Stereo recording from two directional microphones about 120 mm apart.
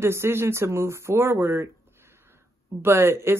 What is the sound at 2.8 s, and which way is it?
Speech, 20° right (ahead or behind).